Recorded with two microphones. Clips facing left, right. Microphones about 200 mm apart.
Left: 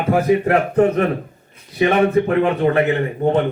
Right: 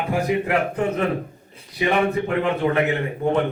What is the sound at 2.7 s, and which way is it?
Speech, 30° left (ahead or behind).